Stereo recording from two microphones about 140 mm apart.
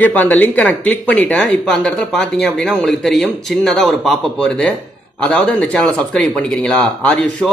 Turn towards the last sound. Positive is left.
turn(degrees=5)  # may be behind; listen again after turning